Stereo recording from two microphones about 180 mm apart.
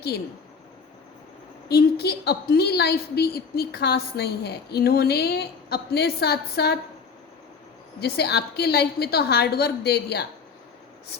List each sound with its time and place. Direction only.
1.6 s a woman's voice: 65° left (ahead or behind)
7.9 s a woman's voice: 65° left (ahead or behind)